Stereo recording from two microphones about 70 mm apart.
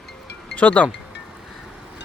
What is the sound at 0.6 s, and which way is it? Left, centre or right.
Speech, centre.